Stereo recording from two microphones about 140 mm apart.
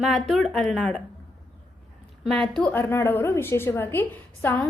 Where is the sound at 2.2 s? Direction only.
5° left (ahead or behind).